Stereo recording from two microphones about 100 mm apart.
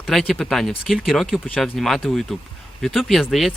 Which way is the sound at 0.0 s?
Centre (ahead or behind).